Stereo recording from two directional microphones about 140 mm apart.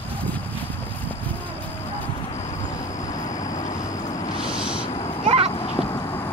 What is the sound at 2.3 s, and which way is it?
Vehicle, 60° left (ahead or behind).